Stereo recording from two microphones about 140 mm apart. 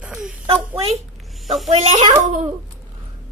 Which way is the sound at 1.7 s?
55° right (ahead or behind).